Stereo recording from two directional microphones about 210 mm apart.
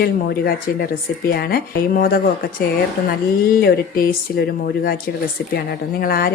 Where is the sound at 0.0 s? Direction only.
50° left (ahead or behind).